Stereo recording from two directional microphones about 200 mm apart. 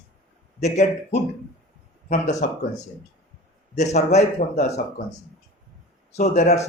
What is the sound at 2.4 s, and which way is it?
Speech, 40° left (ahead or behind).